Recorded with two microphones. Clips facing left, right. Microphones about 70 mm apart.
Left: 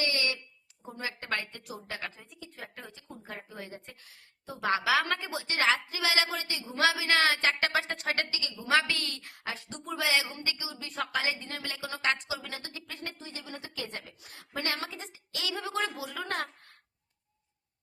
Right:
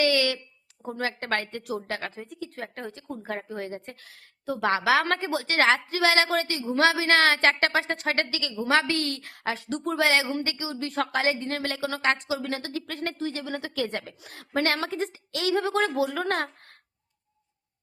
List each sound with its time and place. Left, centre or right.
0.0 s a sound: right
0.9 s speech: right
2.0 s speech: right
3.9 s a woman's voice: right
4.7 s speech: right
7.7 s speech: right
8.3 s speech: right
8.8 s speech: right
12.0 s speech: right